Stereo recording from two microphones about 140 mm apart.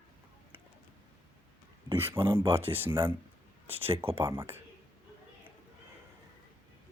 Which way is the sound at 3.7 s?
45° right (ahead or behind).